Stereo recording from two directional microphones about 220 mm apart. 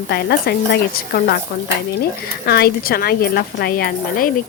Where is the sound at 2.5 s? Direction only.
45° left (ahead or behind).